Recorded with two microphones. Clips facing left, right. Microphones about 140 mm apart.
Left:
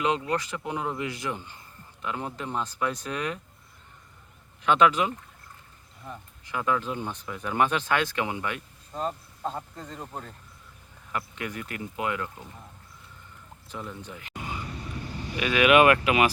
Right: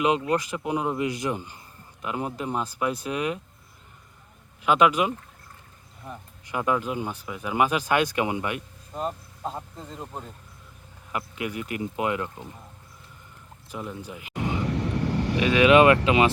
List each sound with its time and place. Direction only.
0.0 s speech: 15° right (ahead or behind)
4.6 s speech: 10° right (ahead or behind)
13.7 s speech: 10° right (ahead or behind)
14.6 s vehicle: 75° right (ahead or behind)
15.4 s speech: 25° right (ahead or behind)